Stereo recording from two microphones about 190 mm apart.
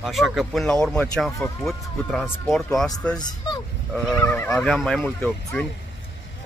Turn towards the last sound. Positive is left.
turn(degrees=10)  # may be behind; listen again after turning